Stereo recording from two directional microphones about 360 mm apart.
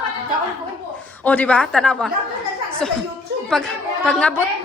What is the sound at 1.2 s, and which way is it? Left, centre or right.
Speech, centre.